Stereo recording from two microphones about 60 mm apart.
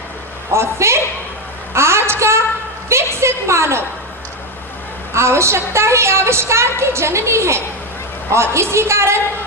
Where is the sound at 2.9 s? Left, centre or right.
Right.